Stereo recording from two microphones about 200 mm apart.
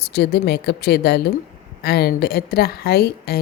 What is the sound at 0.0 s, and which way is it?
A woman's voice, 55° left (ahead or behind).